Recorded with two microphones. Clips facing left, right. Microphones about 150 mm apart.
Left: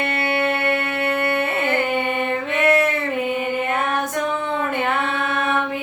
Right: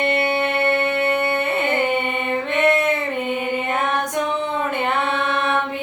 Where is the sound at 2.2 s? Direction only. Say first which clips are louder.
Right 2 dB; centre (ahead or behind).